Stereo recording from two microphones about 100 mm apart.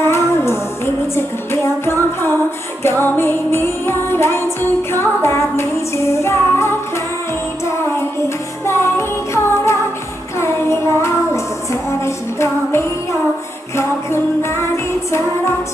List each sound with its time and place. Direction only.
0.0 s music: 25° left (ahead or behind)
8.6 s music: 25° left (ahead or behind)
10.3 s child singing: 25° left (ahead or behind)
13.7 s music: 25° left (ahead or behind)